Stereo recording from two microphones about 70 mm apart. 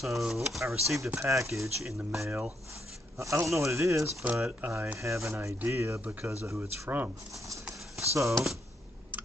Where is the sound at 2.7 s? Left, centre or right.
Right.